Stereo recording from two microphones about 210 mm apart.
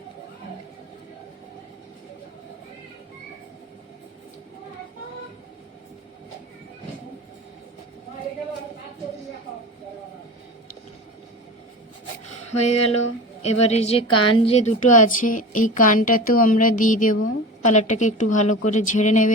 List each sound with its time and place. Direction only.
12.5 s a woman's voice: 30° left (ahead or behind)